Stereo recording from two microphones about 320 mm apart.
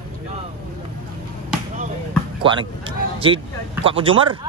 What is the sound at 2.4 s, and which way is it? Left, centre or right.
A man's voice, centre.